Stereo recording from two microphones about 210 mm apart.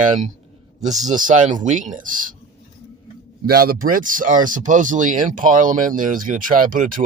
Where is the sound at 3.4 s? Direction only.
45° right (ahead or behind).